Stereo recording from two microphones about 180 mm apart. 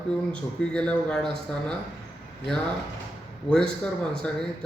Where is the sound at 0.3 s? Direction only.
5° left (ahead or behind).